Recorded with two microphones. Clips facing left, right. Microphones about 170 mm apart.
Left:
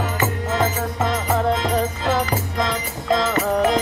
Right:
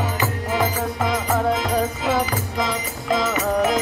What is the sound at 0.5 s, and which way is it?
Music, 10° right (ahead or behind).